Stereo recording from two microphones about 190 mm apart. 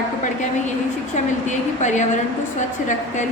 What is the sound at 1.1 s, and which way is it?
A woman's voice, 40° left (ahead or behind).